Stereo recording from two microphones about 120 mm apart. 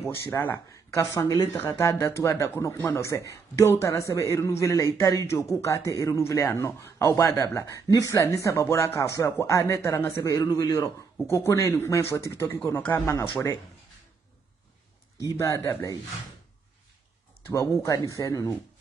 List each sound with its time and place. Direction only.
0.1 s speech: 20° left (ahead or behind)
10.3 s a man's voice: 35° left (ahead or behind)
15.3 s speech: 25° left (ahead or behind)
17.5 s speech: 25° left (ahead or behind)